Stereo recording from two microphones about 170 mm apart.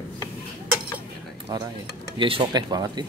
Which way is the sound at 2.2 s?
30° right (ahead or behind).